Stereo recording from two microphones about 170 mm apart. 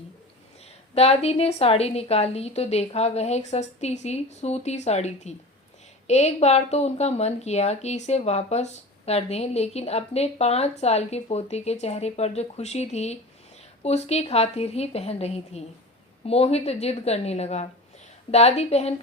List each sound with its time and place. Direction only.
0.6 s speech: 35° left (ahead or behind)